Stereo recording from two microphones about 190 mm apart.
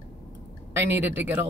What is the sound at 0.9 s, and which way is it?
Speech, 10° right (ahead or behind).